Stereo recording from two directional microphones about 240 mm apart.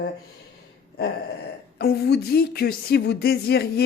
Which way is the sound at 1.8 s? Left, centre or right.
Left.